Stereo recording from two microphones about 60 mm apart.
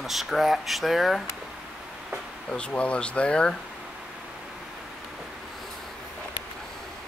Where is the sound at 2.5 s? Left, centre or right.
Centre.